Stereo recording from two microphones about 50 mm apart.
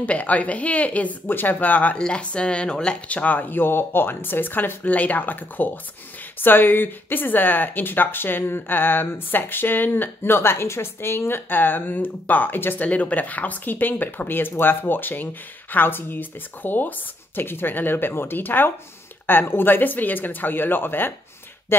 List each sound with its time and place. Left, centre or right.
0.0 s a woman's voice: left
1.2 s speech: left
2.0 s speech: centre; by 12.8 s left
12.8 s speech: left